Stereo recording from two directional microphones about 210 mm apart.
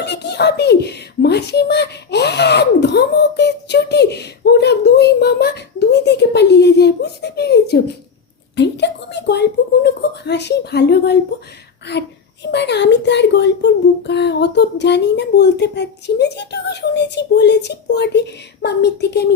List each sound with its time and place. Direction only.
0.0 s a child's voice: 55° left (ahead or behind)